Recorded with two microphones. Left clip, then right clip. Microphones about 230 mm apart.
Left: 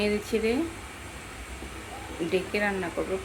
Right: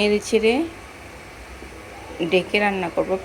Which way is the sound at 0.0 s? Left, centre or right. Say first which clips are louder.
Right 8 dB; right.